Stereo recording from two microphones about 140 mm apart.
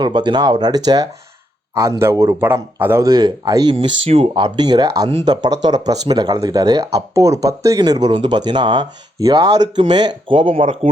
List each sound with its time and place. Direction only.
0.0 s a man's voice: 35° right (ahead or behind); by 3.1 s 15° right (ahead or behind)
3.1 s speech: 30° right (ahead or behind)